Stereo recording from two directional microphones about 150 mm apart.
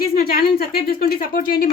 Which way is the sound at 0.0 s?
85° left.